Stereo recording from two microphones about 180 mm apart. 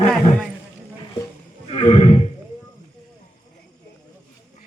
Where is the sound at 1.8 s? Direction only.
30° left (ahead or behind).